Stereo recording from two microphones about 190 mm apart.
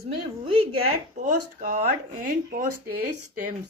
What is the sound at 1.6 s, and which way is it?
Speech, 40° right (ahead or behind).